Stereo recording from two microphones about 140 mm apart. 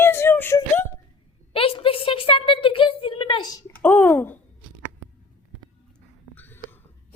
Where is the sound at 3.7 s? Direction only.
15° left (ahead or behind).